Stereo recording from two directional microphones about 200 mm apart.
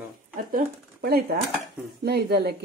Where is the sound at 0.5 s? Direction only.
50° right (ahead or behind).